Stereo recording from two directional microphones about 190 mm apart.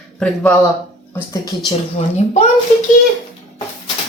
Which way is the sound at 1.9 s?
35° left (ahead or behind).